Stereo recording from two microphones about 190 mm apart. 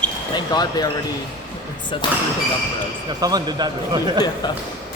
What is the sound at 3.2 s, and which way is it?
A man's voice, 20° right (ahead or behind).